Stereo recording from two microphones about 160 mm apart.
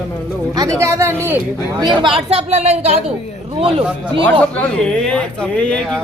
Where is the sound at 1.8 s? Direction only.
30° right (ahead or behind).